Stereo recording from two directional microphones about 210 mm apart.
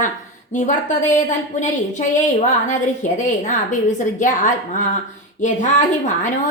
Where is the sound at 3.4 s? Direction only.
35° left (ahead or behind).